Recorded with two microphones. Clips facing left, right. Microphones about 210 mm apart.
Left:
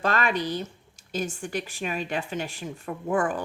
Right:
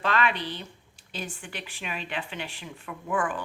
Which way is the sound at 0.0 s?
45° left (ahead or behind).